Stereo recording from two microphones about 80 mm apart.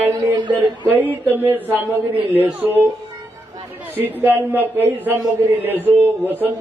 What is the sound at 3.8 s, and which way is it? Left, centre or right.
Speech, right.